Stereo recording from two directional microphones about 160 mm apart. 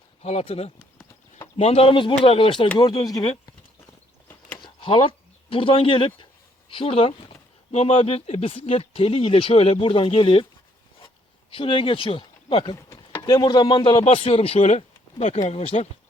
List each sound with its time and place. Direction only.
0.2 s speech: 40° left (ahead or behind); by 3.2 s 25° left (ahead or behind)
4.5 s a sound: 30° left (ahead or behind)
6.7 s speech: 35° left (ahead or behind)
11.5 s speech: 35° left (ahead or behind)
12.7 s chopping: 15° left (ahead or behind)
13.2 s speech: 25° left (ahead or behind)